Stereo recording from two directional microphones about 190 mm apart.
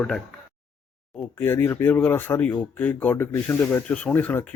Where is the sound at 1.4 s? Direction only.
10° left (ahead or behind).